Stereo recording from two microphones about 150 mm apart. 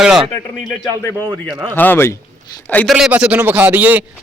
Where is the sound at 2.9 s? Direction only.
5° right (ahead or behind).